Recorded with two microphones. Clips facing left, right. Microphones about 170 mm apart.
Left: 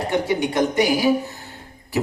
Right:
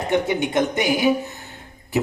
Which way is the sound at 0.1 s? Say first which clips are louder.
Right 2 dB; 20° right (ahead or behind).